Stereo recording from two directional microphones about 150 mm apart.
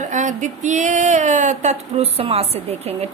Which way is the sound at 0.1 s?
55° right (ahead or behind).